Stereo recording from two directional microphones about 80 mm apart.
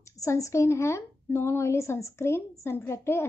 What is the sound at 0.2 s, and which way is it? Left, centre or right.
A woman's voice, left.